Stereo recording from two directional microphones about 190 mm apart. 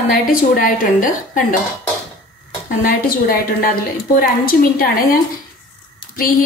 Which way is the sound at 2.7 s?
50° left (ahead or behind).